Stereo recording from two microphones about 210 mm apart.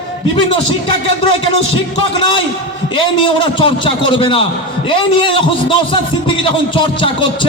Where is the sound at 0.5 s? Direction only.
25° left (ahead or behind).